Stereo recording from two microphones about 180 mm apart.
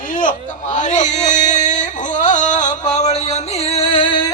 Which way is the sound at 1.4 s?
40° left (ahead or behind).